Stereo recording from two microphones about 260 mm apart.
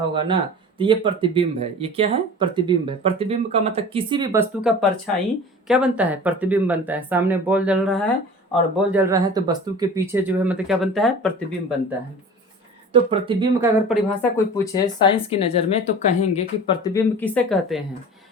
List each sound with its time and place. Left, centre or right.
0.1 s speech: centre
12.9 s speech: centre
14.3 s speech: centre